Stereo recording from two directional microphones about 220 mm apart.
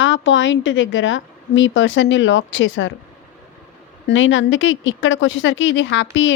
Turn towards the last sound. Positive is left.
turn(degrees=60)  # may be behind; listen again after turning